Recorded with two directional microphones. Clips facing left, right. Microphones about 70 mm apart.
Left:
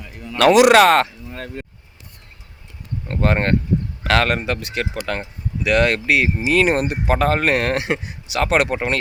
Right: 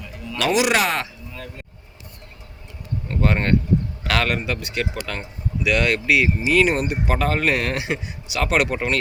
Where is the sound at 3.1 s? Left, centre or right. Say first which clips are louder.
Left 2 dB; left.